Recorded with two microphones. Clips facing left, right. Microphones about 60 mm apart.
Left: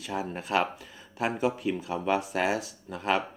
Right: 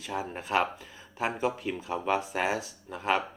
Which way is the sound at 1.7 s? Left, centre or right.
Right.